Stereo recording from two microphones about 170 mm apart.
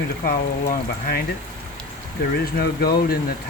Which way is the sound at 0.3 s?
60° left (ahead or behind).